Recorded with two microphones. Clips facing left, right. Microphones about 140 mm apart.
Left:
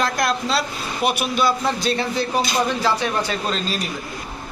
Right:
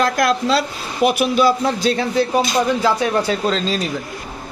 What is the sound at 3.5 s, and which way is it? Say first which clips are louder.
Speech: right 5 dB; 90° right.